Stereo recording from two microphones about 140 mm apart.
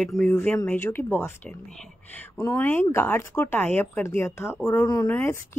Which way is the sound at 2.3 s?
20° left (ahead or behind).